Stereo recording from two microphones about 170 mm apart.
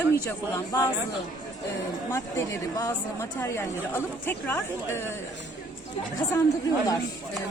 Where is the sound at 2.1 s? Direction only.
15° left (ahead or behind).